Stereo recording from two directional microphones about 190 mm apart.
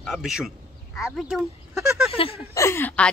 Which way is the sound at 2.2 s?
30° left (ahead or behind).